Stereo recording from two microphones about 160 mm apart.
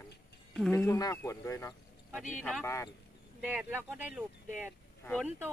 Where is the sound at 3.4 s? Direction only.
10° right (ahead or behind).